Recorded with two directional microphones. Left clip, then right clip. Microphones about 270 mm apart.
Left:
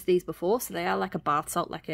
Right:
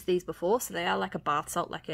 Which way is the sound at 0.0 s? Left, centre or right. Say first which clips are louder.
Left 3 dB; centre.